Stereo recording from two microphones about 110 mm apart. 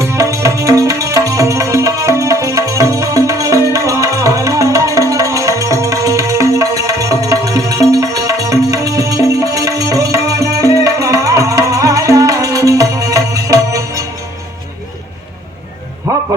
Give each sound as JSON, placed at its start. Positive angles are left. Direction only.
{"t": 0.0, "sound": "music", "side_deg": -30}
{"t": 16.1, "sound": "music", "side_deg": -25}